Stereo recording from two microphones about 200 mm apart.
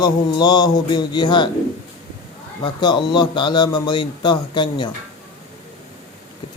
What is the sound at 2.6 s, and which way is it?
Speech, 20° left (ahead or behind).